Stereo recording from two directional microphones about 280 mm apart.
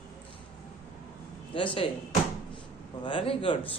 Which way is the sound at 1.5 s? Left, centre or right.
Centre.